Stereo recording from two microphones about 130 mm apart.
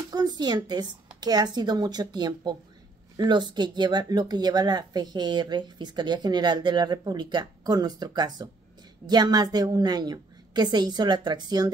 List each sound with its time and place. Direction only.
0.1 s speech: 30° right (ahead or behind)